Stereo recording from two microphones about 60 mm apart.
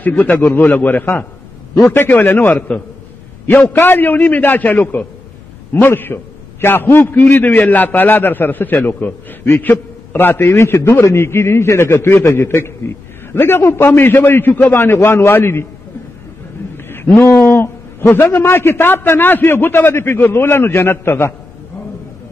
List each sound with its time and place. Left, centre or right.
0.2 s a man's voice: left
0.6 s a man's voice: left
3.6 s a man's voice: left
16.9 s a man's voice: left